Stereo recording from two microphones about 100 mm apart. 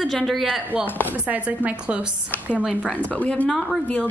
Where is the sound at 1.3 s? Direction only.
15° right (ahead or behind).